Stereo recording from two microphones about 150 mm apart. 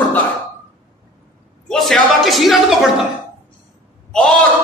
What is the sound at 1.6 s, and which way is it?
A man's voice, 5° left (ahead or behind).